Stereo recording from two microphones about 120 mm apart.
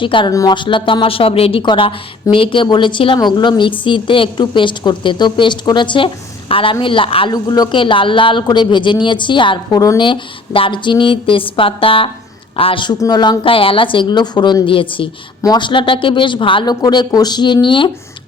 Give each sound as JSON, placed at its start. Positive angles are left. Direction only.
{"t": 0.0, "sound": "speech", "side_deg": 45}
{"t": 0.3, "sound": "a woman's voice", "side_deg": 30}
{"t": 7.3, "sound": "a woman's voice", "side_deg": 35}